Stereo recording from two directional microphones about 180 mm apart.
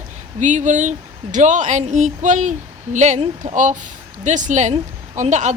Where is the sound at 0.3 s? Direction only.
40° right (ahead or behind).